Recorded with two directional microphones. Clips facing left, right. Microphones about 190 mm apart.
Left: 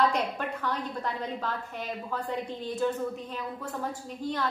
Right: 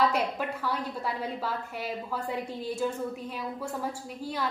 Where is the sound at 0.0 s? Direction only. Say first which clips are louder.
Even; 10° right (ahead or behind).